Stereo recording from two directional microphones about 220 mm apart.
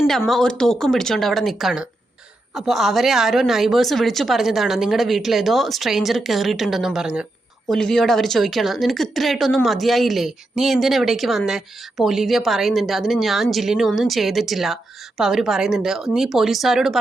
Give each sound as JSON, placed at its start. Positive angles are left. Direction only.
{"t": 0.0, "sound": "speech", "side_deg": 5}